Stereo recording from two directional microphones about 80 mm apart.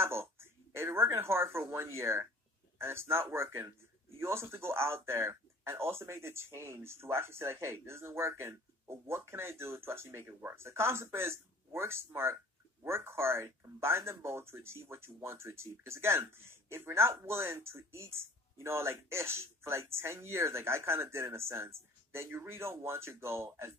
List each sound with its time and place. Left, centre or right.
0.0 s speech: right